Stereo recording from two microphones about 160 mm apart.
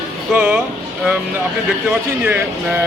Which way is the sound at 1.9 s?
15° right (ahead or behind).